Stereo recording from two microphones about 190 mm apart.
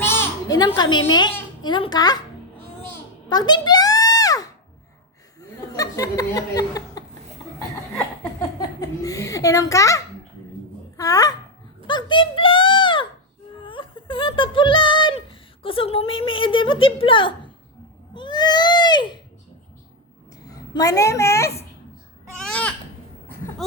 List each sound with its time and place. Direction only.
0.0 s a sound: 10° left (ahead or behind)
3.2 s a sound: 20° left (ahead or behind)
5.4 s chuckle: 20° left (ahead or behind)
8.4 s a child's voice: 15° left (ahead or behind)
11.9 s a sound: 25° left (ahead or behind)
13.6 s whimper: 25° left (ahead or behind)
18.1 s baby cry: 25° left (ahead or behind)
20.4 s a woman's voice: 20° left (ahead or behind)
22.4 s babbling: 5° left (ahead or behind)